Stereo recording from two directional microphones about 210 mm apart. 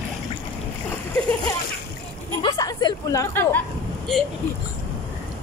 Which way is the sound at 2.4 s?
20° left (ahead or behind).